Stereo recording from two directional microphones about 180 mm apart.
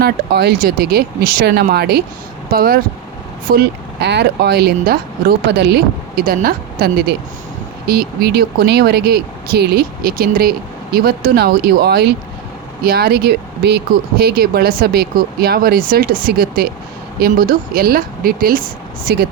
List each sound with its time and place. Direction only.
0.0 s speech: 60° right (ahead or behind)
4.0 s speech: 70° right (ahead or behind)